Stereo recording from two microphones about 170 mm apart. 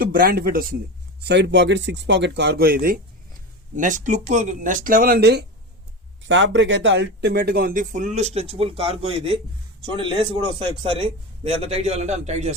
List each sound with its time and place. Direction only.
0.0 s speech: 60° right (ahead or behind)
1.2 s speech: 85° right; by 3.0 s 60° right (ahead or behind)
3.8 s speech: 50° right (ahead or behind); by 5.5 s 75° right (ahead or behind)
6.2 s a man's voice: 90° right; by 12.5 s 40° right (ahead or behind)